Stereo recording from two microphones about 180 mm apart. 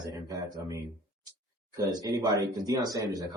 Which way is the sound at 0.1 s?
20° right (ahead or behind).